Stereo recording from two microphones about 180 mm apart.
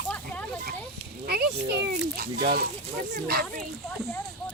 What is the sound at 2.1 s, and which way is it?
Speech, 55° right (ahead or behind).